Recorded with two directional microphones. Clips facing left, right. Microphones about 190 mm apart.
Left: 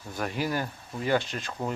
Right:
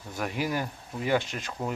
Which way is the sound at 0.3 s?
15° right (ahead or behind).